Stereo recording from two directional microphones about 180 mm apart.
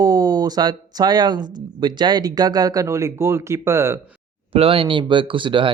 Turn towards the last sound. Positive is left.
turn(degrees=-25)  # may be behind; listen again after turning